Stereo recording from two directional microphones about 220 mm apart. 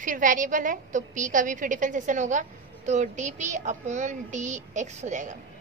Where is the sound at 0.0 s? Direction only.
35° right (ahead or behind).